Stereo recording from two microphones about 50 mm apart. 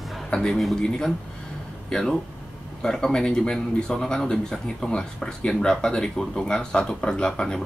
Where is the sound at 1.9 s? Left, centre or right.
Centre.